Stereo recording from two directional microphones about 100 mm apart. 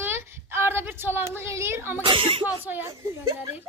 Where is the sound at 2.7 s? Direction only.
20° right (ahead or behind).